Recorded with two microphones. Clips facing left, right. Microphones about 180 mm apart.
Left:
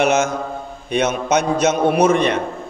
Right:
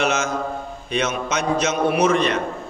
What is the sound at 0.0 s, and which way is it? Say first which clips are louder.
A man's voice: left 5 dB; 60° left (ahead or behind).